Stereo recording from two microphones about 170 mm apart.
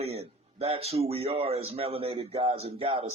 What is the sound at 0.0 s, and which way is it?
A man's voice, 35° right (ahead or behind).